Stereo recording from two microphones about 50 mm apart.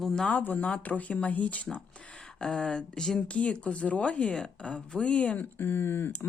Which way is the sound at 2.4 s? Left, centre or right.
Centre.